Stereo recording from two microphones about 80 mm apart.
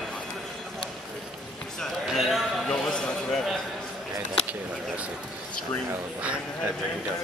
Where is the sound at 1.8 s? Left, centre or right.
Centre.